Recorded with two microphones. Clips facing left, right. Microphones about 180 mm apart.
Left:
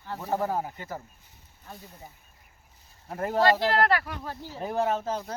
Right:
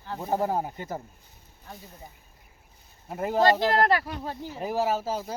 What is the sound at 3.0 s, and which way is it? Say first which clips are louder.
Speech: right 1 dB; 5° right (ahead or behind).